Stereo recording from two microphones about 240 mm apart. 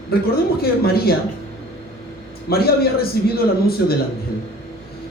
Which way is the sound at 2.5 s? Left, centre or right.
Left.